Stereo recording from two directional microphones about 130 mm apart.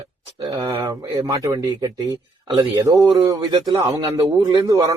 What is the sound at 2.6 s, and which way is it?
A man's voice, 30° right (ahead or behind).